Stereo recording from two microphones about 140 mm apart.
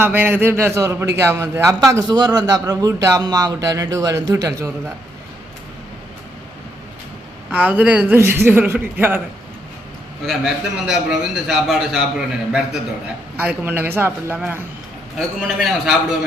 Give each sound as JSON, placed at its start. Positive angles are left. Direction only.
{"t": 0.0, "sound": "a man's voice", "side_deg": -15}
{"t": 7.5, "sound": "a man's voice", "side_deg": -10}
{"t": 10.2, "sound": "a man's voice", "side_deg": -5}
{"t": 13.3, "sound": "a man's voice", "side_deg": -15}
{"t": 15.4, "sound": "a man's voice", "side_deg": 0}